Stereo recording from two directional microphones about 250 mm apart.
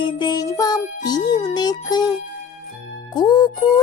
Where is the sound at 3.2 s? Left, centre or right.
Centre.